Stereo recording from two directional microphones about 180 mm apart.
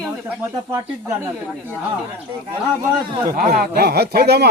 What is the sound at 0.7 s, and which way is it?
Speech, 15° right (ahead or behind).